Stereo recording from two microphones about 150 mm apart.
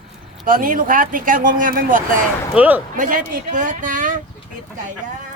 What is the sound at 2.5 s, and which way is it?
Speech, 10° right (ahead or behind).